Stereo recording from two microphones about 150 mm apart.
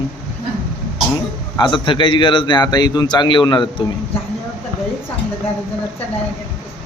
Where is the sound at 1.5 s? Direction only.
30° left (ahead or behind).